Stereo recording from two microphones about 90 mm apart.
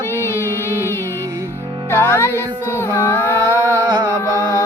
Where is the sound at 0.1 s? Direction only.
25° left (ahead or behind).